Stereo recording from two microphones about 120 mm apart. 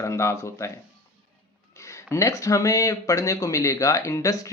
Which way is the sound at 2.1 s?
25° left (ahead or behind).